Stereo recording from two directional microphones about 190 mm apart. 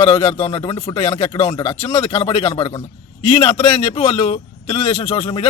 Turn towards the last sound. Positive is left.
turn(degrees=30)  # may be behind; listen again after turning